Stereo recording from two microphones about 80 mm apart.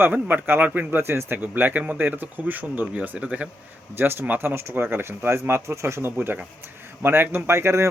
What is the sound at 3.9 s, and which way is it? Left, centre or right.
Speech, right.